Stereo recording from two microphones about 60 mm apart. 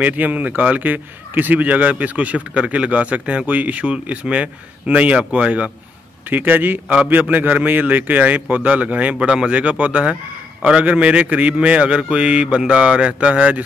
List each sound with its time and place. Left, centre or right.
0.0 s a man's voice: right